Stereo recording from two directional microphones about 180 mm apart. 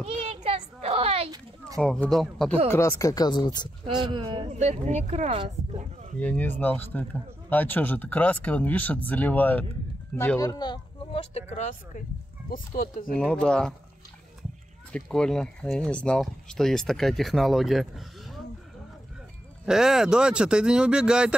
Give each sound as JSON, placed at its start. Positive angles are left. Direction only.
{"t": 0.0, "sound": "children playing", "side_deg": -30}
{"t": 1.8, "sound": "speech", "side_deg": 5}
{"t": 2.7, "sound": "speech", "side_deg": 15}
{"t": 3.8, "sound": "speech", "side_deg": -25}
{"t": 6.1, "sound": "speech", "side_deg": 5}
{"t": 10.5, "sound": "speech", "side_deg": 25}
{"t": 12.4, "sound": "speech", "side_deg": 55}
{"t": 13.1, "sound": "speech", "side_deg": 5}
{"t": 14.9, "sound": "speech", "side_deg": 5}
{"t": 19.6, "sound": "speech", "side_deg": -5}